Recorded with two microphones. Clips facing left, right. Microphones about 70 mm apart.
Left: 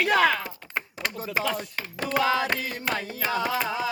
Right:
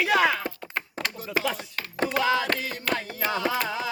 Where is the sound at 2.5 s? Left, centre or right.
Centre.